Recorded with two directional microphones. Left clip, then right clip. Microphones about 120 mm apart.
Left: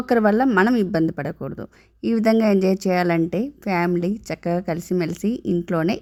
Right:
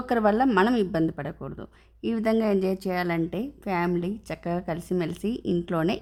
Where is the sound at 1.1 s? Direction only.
35° left (ahead or behind).